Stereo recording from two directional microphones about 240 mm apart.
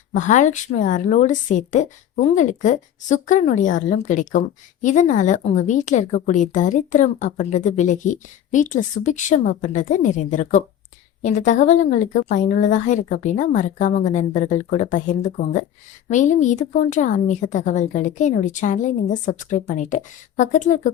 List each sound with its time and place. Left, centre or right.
0.1 s a woman's voice: left